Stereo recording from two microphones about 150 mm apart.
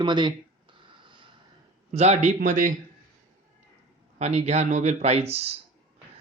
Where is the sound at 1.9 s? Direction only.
45° right (ahead or behind).